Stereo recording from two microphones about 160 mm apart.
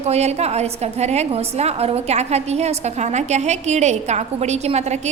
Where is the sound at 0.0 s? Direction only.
40° right (ahead or behind).